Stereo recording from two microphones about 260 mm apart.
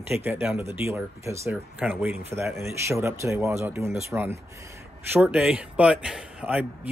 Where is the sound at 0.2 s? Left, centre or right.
Centre.